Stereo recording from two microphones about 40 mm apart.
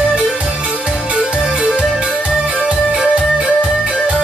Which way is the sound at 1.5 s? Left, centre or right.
Right.